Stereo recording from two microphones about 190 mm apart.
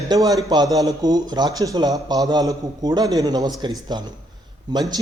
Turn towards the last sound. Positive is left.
turn(degrees=-20)  # may be behind; listen again after turning